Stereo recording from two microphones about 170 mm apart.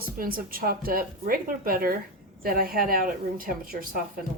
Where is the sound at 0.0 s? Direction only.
60° right (ahead or behind).